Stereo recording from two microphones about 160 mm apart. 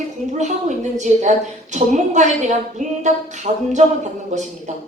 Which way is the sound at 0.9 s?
50° right (ahead or behind).